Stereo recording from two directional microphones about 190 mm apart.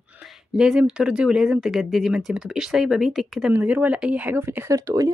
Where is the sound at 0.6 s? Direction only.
5° right (ahead or behind).